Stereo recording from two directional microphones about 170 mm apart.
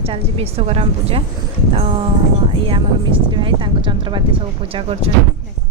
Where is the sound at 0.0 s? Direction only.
35° right (ahead or behind).